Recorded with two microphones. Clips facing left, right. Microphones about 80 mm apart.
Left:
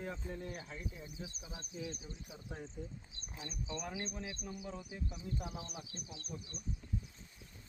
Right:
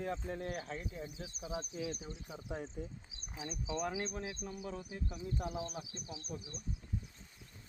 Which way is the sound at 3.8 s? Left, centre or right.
Right.